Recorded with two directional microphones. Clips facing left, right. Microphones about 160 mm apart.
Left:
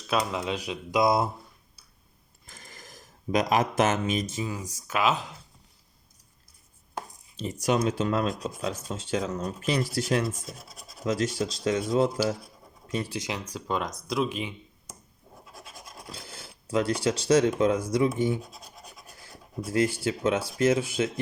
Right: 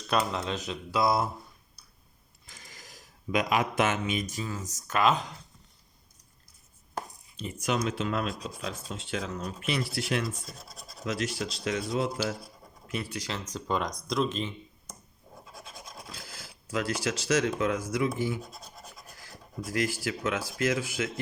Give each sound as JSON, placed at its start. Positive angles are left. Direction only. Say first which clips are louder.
{"t": 0.1, "sound": "speech", "louder": "left 1 dB", "side_deg": 5}
{"t": 2.5, "sound": "a sound", "louder": "left 3 dB", "side_deg": 50}
{"t": 4.3, "sound": "speech", "louder": "left 3 dB", "side_deg": 20}
{"t": 7.3, "sound": "speech", "louder": "left 4 dB", "side_deg": 35}
{"t": 10.4, "sound": "speech", "louder": "left 3 dB", "side_deg": 5}
{"t": 11.0, "sound": "speech", "louder": "left 5 dB", "side_deg": 35}
{"t": 13.1, "sound": "speech", "louder": "left 3 dB", "side_deg": 20}
{"t": 13.5, "sound": "speech", "louder": "right 1 dB", "side_deg": 5}
{"t": 16.1, "sound": "speech", "louder": "left 2 dB", "side_deg": 30}